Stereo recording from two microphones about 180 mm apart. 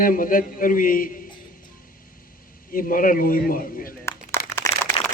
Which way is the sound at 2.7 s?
50° left (ahead or behind).